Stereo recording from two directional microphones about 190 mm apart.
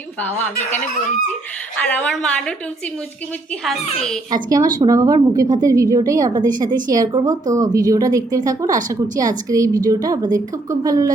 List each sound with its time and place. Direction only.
0.2 s speech: 10° left (ahead or behind)
1.8 s a woman's voice: 5° left (ahead or behind)
4.4 s a woman's voice: 20° right (ahead or behind)